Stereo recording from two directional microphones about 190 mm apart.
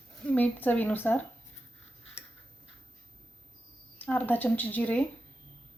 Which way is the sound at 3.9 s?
10° left (ahead or behind).